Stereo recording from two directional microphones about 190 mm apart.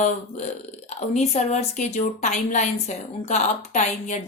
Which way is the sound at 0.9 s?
35° left (ahead or behind).